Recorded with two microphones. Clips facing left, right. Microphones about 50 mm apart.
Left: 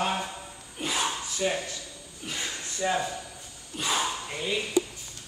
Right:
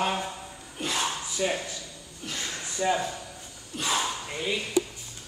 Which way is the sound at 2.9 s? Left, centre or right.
Centre.